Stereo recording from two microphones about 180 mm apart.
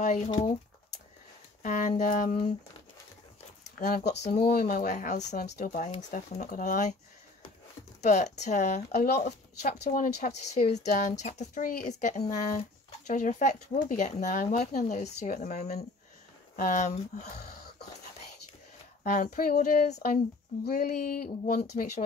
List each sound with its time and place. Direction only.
0.0 s speech: 40° left (ahead or behind)
1.6 s speech: 45° left (ahead or behind)
3.8 s speech: 60° left (ahead or behind)
4.4 s speech: 55° left (ahead or behind)
8.0 s speech: 40° left (ahead or behind)
17.2 s wheeze: 60° left (ahead or behind)
19.0 s speech: 45° left (ahead or behind)